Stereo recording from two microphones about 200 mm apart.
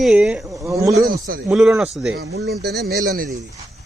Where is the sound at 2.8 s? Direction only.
50° right (ahead or behind).